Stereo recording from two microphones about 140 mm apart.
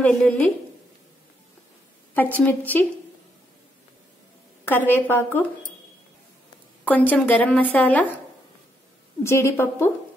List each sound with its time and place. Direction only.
0.2 s a woman's voice: 10° left (ahead or behind)
2.1 s a woman's voice: 10° left (ahead or behind)
4.6 s a woman's voice: 15° left (ahead or behind)
6.8 s a woman's voice: 10° left (ahead or behind)
9.2 s a woman's voice: 20° left (ahead or behind)